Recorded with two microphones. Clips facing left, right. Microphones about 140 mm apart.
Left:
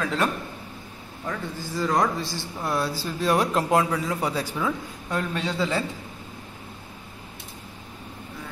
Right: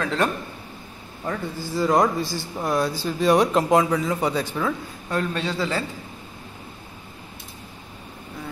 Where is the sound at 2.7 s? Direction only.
5° left (ahead or behind).